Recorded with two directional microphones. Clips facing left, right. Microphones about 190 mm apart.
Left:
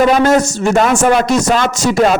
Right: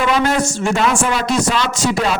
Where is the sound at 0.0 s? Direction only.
45° left (ahead or behind).